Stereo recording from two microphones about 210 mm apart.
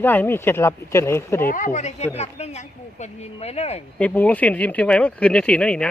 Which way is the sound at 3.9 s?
5° left (ahead or behind).